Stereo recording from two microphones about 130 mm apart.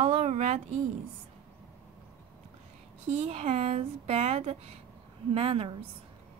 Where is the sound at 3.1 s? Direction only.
55° right (ahead or behind).